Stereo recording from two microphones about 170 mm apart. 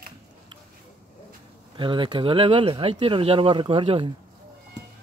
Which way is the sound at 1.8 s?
30° right (ahead or behind).